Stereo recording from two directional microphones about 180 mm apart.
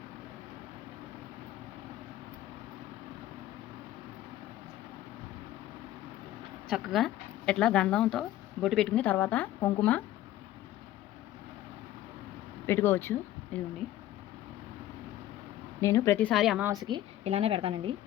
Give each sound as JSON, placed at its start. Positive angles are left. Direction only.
{"t": 6.7, "sound": "speech", "side_deg": 0}
{"t": 12.6, "sound": "speech", "side_deg": 15}
{"t": 15.8, "sound": "speech", "side_deg": 15}
{"t": 16.3, "sound": "speech", "side_deg": 0}
{"t": 16.6, "sound": "a woman's voice", "side_deg": -20}
{"t": 17.2, "sound": "a woman's voice", "side_deg": -35}